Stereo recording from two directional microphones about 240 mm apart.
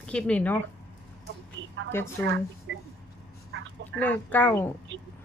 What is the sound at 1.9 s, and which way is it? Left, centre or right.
Speech, centre.